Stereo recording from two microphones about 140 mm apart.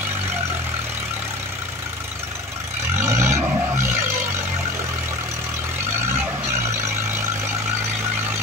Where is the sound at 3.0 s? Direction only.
20° right (ahead or behind).